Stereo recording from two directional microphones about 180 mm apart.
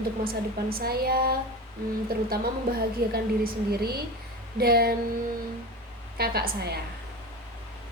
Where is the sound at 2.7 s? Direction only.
55° right (ahead or behind).